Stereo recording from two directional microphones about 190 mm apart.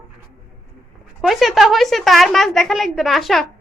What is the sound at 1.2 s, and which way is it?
A woman's voice, centre (ahead or behind).